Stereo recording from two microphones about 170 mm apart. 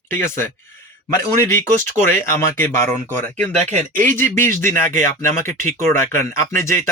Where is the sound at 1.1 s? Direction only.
15° left (ahead or behind).